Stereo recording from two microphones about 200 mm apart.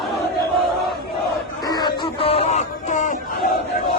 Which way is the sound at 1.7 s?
20° left (ahead or behind).